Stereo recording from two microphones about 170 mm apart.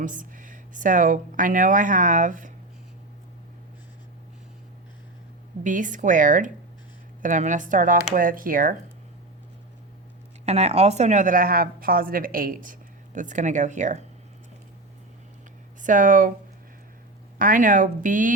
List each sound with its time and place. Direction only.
0.0 s speech: 50° right (ahead or behind)
5.6 s speech: 50° right (ahead or behind)
10.4 s speech: 40° right (ahead or behind)
15.8 s speech: 50° right (ahead or behind)
17.3 s speech: 55° right (ahead or behind)